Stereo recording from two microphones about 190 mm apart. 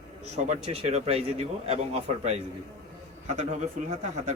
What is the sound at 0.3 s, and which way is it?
Speech, 35° right (ahead or behind).